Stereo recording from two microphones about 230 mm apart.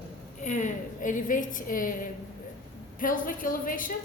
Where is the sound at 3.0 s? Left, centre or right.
Left.